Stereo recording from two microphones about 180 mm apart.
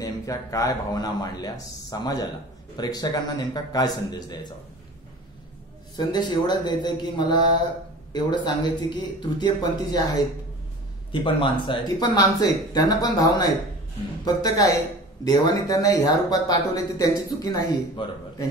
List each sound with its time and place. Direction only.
0.0 s speech: 20° left (ahead or behind)
5.9 s speech: 25° left (ahead or behind)
11.1 s speech: 30° left (ahead or behind)